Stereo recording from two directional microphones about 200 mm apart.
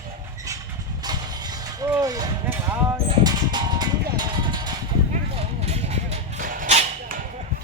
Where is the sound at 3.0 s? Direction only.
20° right (ahead or behind).